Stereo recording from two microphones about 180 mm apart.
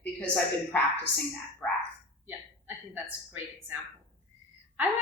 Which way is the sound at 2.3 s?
10° right (ahead or behind).